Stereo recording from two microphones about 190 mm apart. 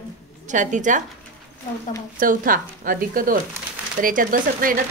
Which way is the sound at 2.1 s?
45° right (ahead or behind).